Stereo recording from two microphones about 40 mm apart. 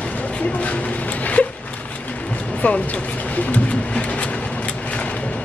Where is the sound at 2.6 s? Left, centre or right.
Left.